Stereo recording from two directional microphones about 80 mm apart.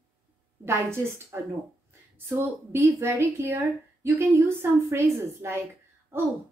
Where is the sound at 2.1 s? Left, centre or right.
Right.